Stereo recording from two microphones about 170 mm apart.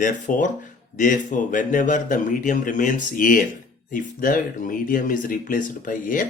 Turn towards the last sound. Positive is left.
turn(degrees=55)  # may be behind; listen again after turning